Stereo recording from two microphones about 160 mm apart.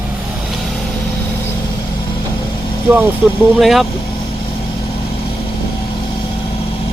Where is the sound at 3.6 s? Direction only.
Centre (ahead or behind).